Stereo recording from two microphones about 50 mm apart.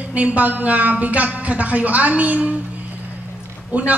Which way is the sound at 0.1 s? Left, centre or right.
Right.